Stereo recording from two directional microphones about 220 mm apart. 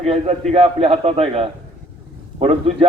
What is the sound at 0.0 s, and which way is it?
A man's voice, 30° right (ahead or behind).